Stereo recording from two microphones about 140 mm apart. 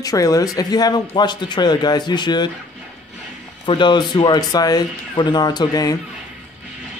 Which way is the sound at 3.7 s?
35° left (ahead or behind).